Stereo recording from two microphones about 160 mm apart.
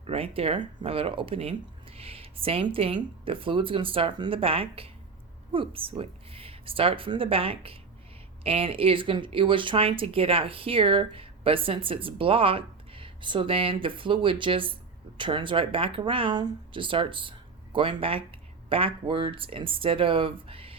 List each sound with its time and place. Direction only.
0.0 s speech: 35° right (ahead or behind)